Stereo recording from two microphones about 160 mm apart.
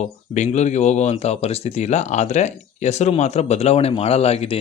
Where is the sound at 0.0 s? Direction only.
45° left (ahead or behind).